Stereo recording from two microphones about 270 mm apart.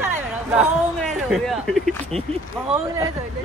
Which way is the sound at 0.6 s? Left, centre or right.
Centre.